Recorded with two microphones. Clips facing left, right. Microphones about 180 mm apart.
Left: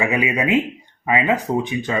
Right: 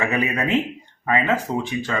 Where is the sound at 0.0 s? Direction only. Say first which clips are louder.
Left 2 dB; 15° left (ahead or behind).